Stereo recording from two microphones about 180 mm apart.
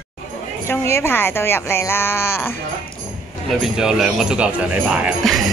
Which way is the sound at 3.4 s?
5° right (ahead or behind).